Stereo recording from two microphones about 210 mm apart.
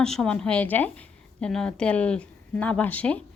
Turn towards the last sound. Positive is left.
turn(degrees=5)  # may be behind; listen again after turning